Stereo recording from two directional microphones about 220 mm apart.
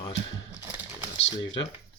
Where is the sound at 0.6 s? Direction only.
10° right (ahead or behind).